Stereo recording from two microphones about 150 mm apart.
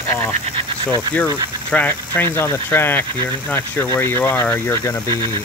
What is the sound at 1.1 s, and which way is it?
Speech, 10° left (ahead or behind).